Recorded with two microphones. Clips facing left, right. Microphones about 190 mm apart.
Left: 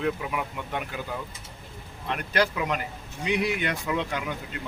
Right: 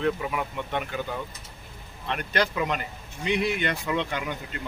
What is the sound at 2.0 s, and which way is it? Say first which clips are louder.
Speech: left 1 dB; 5° left (ahead or behind).